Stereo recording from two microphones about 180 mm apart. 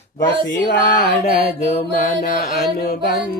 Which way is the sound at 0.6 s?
65° left (ahead or behind).